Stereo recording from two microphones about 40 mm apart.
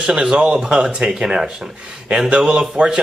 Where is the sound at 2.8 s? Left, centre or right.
Right.